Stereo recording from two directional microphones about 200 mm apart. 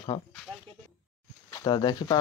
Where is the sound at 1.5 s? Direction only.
20° left (ahead or behind).